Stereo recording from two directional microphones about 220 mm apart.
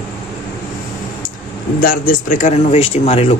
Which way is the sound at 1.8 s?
40° left (ahead or behind).